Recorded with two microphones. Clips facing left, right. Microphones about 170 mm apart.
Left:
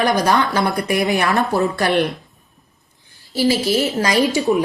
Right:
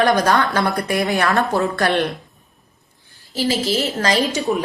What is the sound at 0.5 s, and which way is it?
Speech, 50° right (ahead or behind).